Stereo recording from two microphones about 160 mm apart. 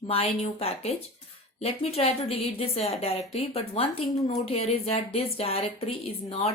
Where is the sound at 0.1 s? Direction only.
40° left (ahead or behind).